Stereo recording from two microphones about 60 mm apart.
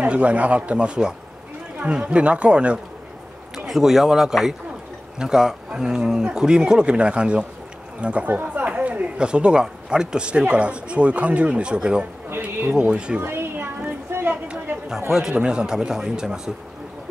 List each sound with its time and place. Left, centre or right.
0.0 s speech: right
3.5 s speech: centre
13.2 s a sound: right
15.0 s speech: centre